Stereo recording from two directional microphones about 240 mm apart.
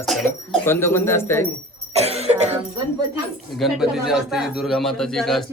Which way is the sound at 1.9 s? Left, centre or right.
Right.